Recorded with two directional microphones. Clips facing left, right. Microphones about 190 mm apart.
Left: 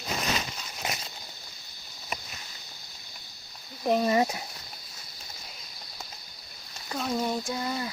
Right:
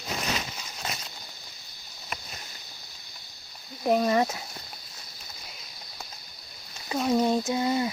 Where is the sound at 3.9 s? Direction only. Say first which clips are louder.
Right 1 dB; 5° left (ahead or behind).